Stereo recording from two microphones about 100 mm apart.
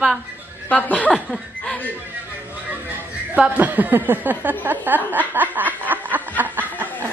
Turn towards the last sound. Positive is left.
turn(degrees=-15)  # may be behind; listen again after turning